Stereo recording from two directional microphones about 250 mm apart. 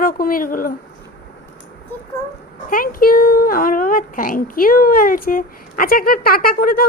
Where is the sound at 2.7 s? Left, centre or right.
Left.